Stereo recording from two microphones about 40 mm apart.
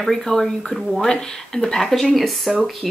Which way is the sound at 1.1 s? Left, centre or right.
Centre.